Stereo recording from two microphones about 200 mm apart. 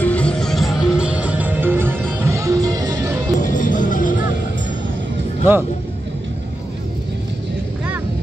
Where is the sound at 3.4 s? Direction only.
40° left (ahead or behind).